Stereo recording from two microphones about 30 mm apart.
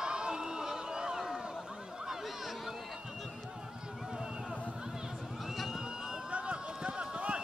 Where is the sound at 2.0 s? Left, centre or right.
Centre.